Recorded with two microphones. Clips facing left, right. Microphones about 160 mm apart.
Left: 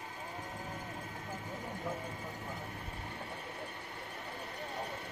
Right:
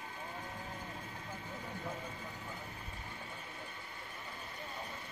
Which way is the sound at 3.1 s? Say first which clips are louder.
Left 4 dB; 65° left (ahead or behind).